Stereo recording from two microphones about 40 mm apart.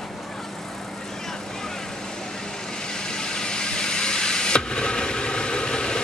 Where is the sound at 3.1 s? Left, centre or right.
Centre.